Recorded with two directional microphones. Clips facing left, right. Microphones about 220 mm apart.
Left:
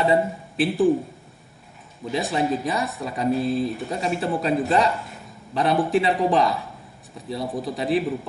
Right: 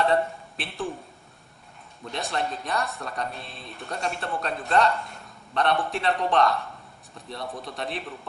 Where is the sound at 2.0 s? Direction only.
Centre (ahead or behind).